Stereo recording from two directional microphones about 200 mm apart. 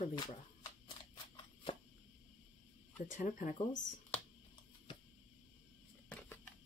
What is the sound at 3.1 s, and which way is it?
Speech, 40° left (ahead or behind).